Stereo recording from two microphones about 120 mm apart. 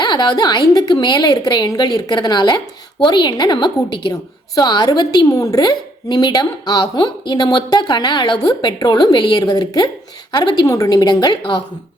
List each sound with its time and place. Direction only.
0.0 s a woman's voice: 40° left (ahead or behind)